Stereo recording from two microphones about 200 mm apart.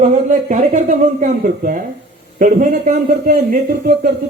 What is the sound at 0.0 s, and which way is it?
A man's voice, 35° right (ahead or behind).